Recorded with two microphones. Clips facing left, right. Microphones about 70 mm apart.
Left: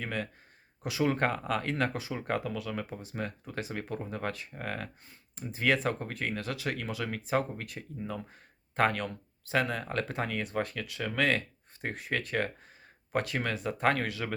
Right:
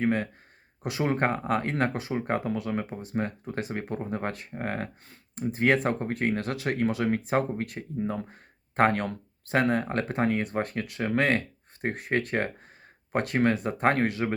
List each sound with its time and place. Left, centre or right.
0.0 s speech: right
5.0 s speech: right